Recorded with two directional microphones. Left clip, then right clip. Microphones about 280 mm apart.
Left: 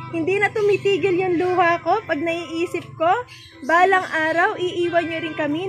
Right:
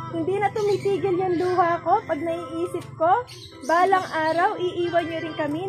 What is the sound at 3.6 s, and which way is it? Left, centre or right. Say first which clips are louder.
Speech: left 3 dB; left.